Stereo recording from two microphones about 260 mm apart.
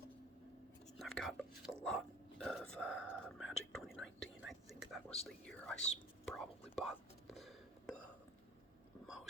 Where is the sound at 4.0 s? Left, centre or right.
Left.